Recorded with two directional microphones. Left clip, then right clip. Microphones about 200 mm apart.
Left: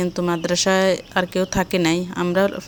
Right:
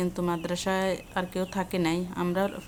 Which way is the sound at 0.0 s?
25° left (ahead or behind).